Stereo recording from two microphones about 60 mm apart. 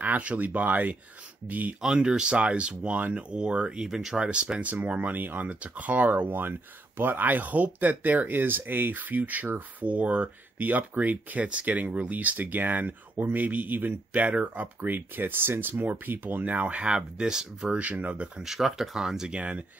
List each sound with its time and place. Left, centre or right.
0.0 s speech: right
2.0 s speech: centre
14.8 s speech: right; by 17.7 s centre
17.7 s speech: right
18.4 s speech: centre